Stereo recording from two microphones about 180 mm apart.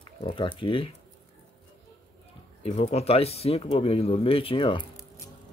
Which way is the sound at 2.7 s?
35° left (ahead or behind).